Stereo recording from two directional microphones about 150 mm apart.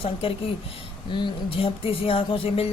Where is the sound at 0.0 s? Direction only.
40° left (ahead or behind).